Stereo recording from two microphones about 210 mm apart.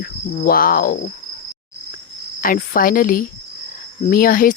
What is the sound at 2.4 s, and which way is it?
Speech, 40° left (ahead or behind).